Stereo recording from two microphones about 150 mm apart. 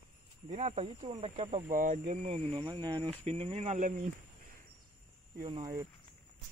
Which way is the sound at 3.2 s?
40° right (ahead or behind).